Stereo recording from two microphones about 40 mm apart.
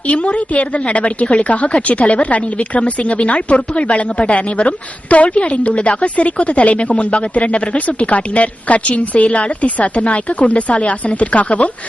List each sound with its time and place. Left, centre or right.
0.1 s speech: left